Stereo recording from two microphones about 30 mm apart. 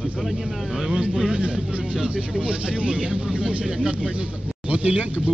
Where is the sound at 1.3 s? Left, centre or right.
Right.